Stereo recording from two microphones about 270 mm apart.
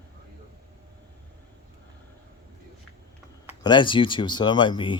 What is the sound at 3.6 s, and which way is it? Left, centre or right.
Speech, centre.